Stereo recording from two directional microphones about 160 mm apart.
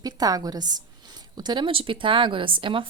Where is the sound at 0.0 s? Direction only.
25° right (ahead or behind).